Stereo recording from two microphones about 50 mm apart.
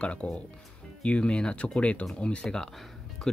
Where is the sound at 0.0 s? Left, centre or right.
Left.